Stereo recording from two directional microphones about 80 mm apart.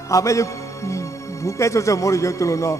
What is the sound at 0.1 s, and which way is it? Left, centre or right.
A man's voice, left.